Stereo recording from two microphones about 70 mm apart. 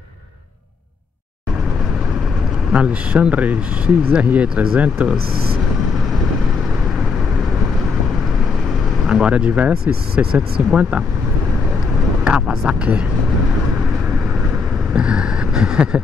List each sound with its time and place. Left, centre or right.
2.7 s speech: centre
9.0 s speech: centre
12.3 s speech: centre
15.0 s speech: centre